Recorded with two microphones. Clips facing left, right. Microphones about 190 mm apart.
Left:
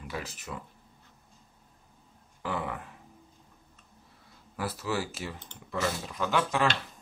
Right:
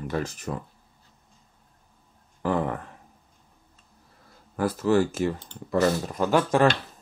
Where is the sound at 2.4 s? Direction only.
45° right (ahead or behind).